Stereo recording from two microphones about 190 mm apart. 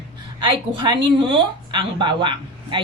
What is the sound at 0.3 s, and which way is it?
A woman's voice, 25° right (ahead or behind).